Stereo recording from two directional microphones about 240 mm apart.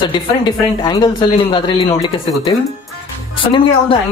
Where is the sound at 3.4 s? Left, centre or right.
Left.